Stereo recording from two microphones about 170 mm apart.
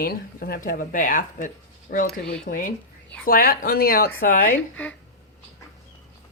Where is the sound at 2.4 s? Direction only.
50° left (ahead or behind).